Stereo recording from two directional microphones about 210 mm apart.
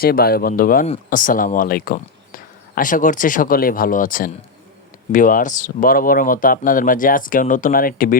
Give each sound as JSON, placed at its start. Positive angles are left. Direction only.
{"t": 0.0, "sound": "speech", "side_deg": 45}